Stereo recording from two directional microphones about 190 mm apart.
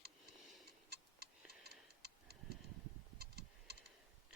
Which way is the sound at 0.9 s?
55° right (ahead or behind).